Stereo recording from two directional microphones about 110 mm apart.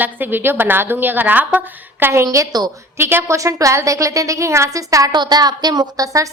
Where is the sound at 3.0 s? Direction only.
20° right (ahead or behind).